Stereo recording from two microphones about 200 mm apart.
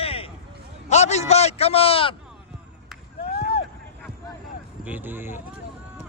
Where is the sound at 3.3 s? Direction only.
55° left (ahead or behind).